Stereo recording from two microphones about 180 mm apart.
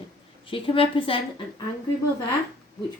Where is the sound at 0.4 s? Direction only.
30° left (ahead or behind).